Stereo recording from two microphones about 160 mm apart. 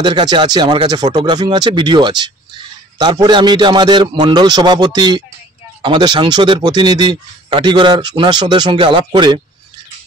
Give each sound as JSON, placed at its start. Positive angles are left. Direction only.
{"t": 0.0, "sound": "speech", "side_deg": -30}